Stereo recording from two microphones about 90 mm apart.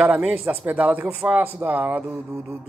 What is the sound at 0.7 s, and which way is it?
Speech, 15° right (ahead or behind).